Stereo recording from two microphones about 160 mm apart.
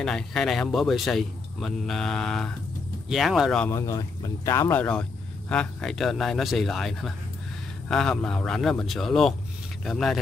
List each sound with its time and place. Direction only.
0.0 s speech: 5° left (ahead or behind)
3.6 s speech: 15° left (ahead or behind); by 10.1 s centre (ahead or behind)